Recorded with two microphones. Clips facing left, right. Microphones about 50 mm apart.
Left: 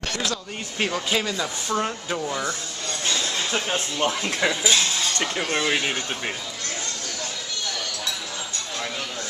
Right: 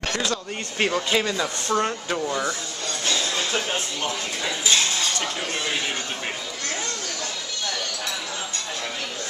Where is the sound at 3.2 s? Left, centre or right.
Centre.